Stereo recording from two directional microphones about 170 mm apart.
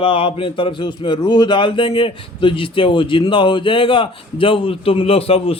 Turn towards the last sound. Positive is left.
turn(degrees=35)  # may be behind; listen again after turning